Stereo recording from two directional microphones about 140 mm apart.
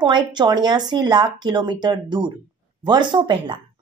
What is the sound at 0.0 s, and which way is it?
Speech, 30° right (ahead or behind).